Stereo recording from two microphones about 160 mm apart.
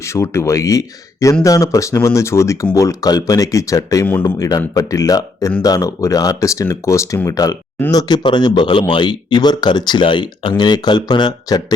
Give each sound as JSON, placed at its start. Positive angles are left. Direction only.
{"t": 0.0, "sound": "speech", "side_deg": 15}